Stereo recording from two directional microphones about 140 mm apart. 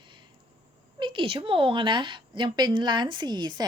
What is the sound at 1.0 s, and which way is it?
A woman's voice, 35° right (ahead or behind).